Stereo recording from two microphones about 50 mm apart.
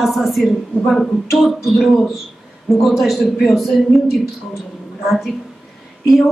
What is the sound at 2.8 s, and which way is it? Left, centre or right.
Speech, centre.